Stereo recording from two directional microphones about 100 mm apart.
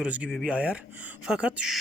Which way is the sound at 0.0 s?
10° right (ahead or behind).